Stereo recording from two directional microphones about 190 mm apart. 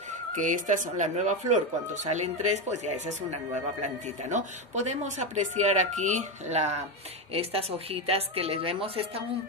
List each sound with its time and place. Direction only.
0.3 s speech: 40° right (ahead or behind)